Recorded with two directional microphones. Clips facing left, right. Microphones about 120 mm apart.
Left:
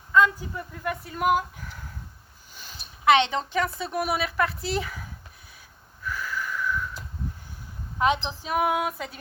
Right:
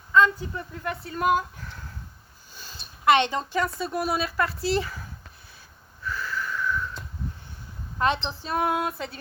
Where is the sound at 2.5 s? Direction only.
15° left (ahead or behind).